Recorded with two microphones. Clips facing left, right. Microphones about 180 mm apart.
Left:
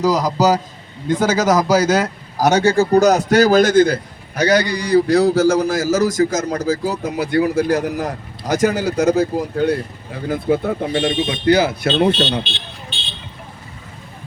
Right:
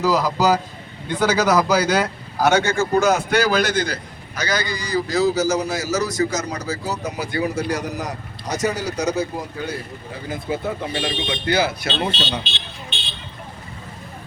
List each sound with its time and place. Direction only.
0.0 s a man's voice: 40° left (ahead or behind); by 10.6 s 60° left (ahead or behind)
10.9 s speech: 40° left (ahead or behind)